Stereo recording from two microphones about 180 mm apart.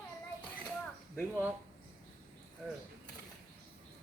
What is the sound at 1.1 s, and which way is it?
Speech, 10° right (ahead or behind).